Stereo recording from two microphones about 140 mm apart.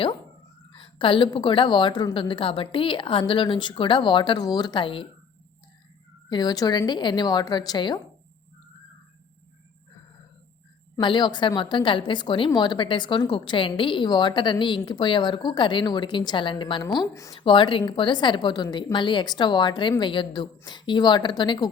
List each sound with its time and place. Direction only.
0.8 s a woman's voice: 35° left (ahead or behind)
6.2 s a woman's voice: 30° left (ahead or behind)
11.0 s a woman's voice: 35° left (ahead or behind)
17.3 s a woman's voice: 35° left (ahead or behind)